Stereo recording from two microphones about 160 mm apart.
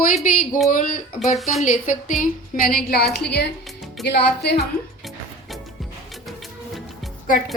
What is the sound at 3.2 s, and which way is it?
Speech, 90° left.